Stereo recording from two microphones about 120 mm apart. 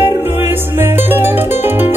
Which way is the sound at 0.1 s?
20° right (ahead or behind).